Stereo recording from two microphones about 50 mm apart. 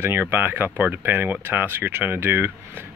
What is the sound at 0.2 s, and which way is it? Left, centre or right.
Speech, right.